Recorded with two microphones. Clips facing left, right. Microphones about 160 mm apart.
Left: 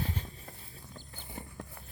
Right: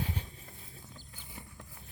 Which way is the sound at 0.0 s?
10° right (ahead or behind).